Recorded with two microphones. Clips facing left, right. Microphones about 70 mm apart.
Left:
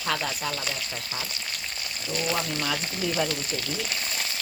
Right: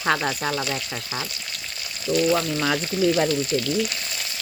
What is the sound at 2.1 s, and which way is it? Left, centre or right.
Speech, right.